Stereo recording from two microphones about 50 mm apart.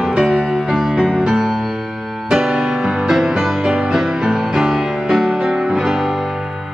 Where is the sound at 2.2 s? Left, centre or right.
Centre.